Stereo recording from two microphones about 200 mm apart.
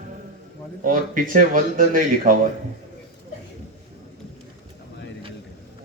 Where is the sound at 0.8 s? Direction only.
45° right (ahead or behind).